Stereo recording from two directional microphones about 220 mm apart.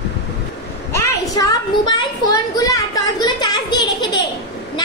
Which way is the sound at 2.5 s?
15° left (ahead or behind).